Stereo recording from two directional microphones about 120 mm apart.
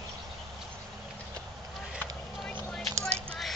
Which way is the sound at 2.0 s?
5° left (ahead or behind).